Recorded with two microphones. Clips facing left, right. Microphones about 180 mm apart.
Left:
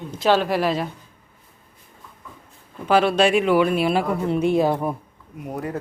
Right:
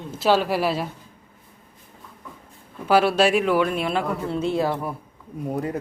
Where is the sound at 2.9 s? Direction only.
5° right (ahead or behind); by 4.9 s 20° left (ahead or behind).